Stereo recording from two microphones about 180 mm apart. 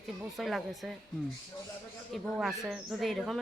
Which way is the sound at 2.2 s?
Centre (ahead or behind).